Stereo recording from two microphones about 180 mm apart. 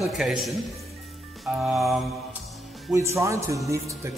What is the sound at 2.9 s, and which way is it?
Speech, 15° right (ahead or behind).